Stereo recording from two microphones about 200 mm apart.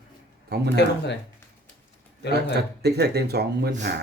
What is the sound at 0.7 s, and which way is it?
Speech, 60° left (ahead or behind).